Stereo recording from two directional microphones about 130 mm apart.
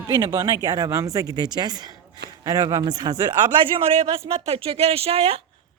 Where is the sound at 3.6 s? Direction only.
45° right (ahead or behind).